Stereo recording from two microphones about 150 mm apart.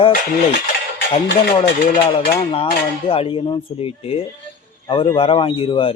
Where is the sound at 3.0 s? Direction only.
40° left (ahead or behind).